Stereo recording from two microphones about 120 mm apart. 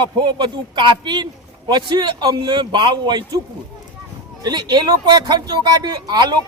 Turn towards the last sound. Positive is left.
turn(degrees=-35)  # may be behind; listen again after turning